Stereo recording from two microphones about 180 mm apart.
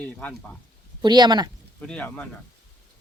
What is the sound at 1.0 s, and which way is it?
Speech, 25° right (ahead or behind).